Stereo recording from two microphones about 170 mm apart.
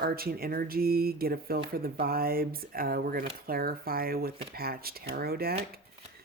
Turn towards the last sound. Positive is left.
turn(degrees=-65)  # may be behind; listen again after turning